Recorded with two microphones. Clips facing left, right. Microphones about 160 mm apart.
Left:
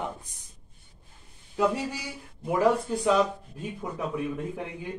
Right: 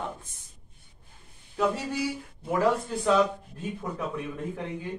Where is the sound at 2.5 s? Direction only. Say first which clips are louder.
Left 2 dB; 10° left (ahead or behind).